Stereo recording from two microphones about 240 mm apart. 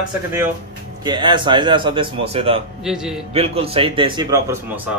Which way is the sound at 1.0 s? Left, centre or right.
Centre.